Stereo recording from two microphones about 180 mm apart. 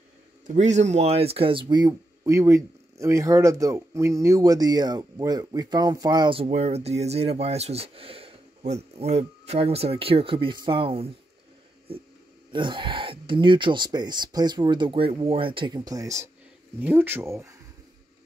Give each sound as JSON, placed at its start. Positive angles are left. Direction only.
{"t": 0.5, "sound": "speech", "side_deg": -40}
{"t": 12.5, "sound": "speech", "side_deg": -25}